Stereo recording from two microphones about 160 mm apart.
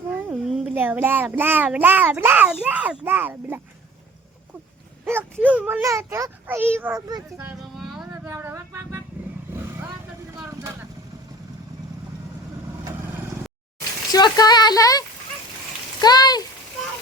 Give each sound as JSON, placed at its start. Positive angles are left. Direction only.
{"t": 0.1, "sound": "a child's voice", "side_deg": -5}
{"t": 5.0, "sound": "a child's voice", "side_deg": -10}
{"t": 7.3, "sound": "a sound", "side_deg": -5}
{"t": 8.1, "sound": "a sound", "side_deg": -15}
{"t": 9.5, "sound": "vehicle", "side_deg": -15}
{"t": 14.1, "sound": "speech", "side_deg": 25}